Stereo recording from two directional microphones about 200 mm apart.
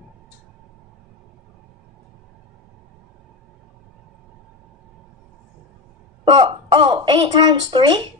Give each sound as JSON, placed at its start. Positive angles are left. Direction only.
{"t": 6.2, "sound": "speech", "side_deg": -25}